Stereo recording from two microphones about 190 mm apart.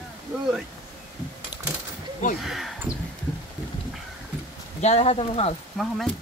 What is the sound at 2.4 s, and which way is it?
Speech, centre (ahead or behind).